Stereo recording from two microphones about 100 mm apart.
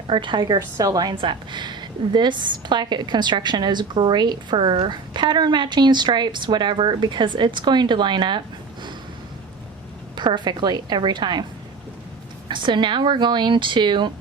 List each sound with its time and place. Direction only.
0.1 s a woman's voice: 50° right (ahead or behind)
1.1 s a woman's voice: 55° right (ahead or behind)
10.2 s a woman's voice: 50° right (ahead or behind)
12.5 s a woman's voice: 50° right (ahead or behind)